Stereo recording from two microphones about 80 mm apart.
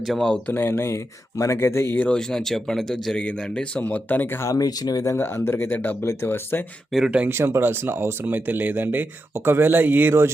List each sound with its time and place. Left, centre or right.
0.0 s speech: centre
0.3 s speech: left
2.0 s speech: centre; by 4.5 s left
4.5 s speech: left
5.1 s speech: left
6.9 s speech: centre
7.3 s speech: right